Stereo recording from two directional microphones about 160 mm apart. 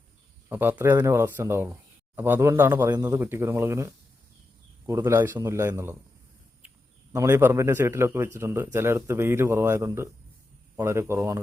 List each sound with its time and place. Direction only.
0.4 s speech: 10° right (ahead or behind)
4.9 s speech: 15° right (ahead or behind)
7.1 s speech: 15° right (ahead or behind)